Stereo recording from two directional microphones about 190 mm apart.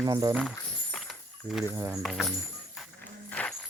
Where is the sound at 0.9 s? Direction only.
Centre (ahead or behind).